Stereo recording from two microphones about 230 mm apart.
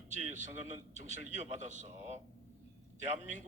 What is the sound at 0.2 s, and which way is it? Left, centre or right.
A man's voice, right.